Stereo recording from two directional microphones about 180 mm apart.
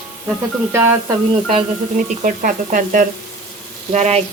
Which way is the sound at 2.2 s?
45° right (ahead or behind).